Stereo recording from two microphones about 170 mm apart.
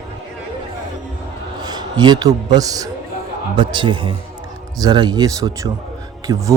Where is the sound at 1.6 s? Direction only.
25° right (ahead or behind).